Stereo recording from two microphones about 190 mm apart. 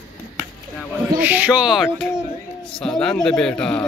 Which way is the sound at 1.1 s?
10° right (ahead or behind).